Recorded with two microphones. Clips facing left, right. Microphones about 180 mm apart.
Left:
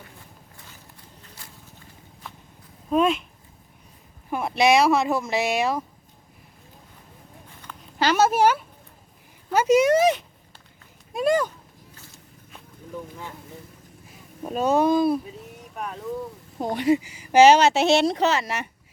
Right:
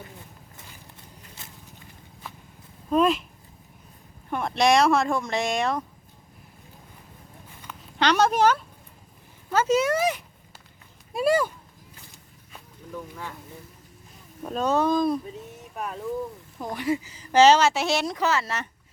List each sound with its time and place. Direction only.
1.4 s a sound: 20° right (ahead or behind)
2.2 s walk: 5° right (ahead or behind)
2.9 s speech: centre (ahead or behind)
4.3 s speech: 5° left (ahead or behind)
7.9 s speech: 5° left (ahead or behind); by 10.2 s 20° left (ahead or behind)
11.1 s speech: 5° right (ahead or behind)
14.4 s speech: 10° left (ahead or behind)
16.6 s speech: 25° left (ahead or behind)